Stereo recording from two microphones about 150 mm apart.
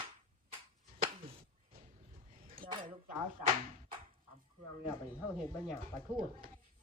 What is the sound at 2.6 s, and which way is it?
Dishes, 35° right (ahead or behind).